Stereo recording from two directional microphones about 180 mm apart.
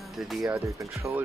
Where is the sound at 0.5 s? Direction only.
15° right (ahead or behind).